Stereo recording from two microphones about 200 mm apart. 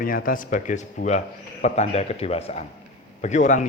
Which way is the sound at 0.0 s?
45° left (ahead or behind).